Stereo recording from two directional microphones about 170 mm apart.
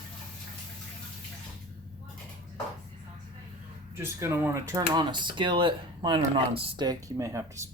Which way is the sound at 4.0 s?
15° right (ahead or behind).